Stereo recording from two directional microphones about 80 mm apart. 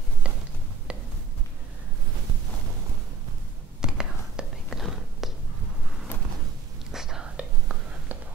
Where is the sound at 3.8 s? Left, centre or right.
Centre.